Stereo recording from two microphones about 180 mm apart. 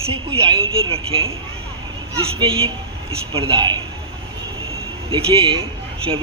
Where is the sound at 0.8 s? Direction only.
30° right (ahead or behind).